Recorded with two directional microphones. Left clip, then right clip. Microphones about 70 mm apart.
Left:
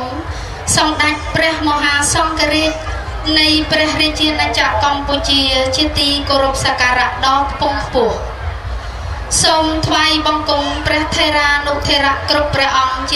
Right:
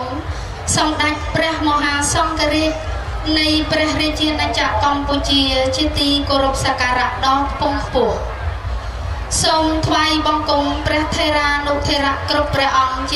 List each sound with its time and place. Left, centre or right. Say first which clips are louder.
0.7 s a woman's voice: left 3 dB; left
9.3 s a woman's voice: left 3 dB; left